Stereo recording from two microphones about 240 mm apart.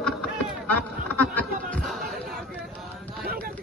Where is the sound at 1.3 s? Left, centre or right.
Centre.